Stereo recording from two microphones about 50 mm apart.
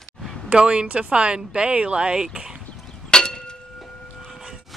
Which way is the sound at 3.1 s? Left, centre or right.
Centre.